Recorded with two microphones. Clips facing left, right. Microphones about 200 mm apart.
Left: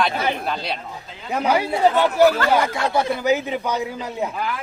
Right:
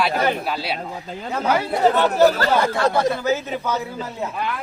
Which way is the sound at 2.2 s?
35° right (ahead or behind).